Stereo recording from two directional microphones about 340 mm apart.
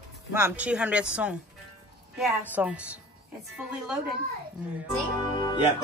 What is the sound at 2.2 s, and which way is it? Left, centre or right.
Speech, centre.